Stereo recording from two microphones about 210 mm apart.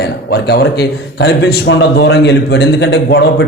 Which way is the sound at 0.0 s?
50° left (ahead or behind).